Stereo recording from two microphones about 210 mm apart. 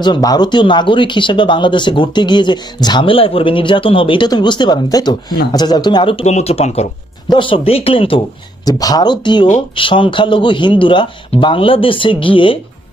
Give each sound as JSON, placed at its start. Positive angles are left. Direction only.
{"t": 0.0, "sound": "speech", "side_deg": 20}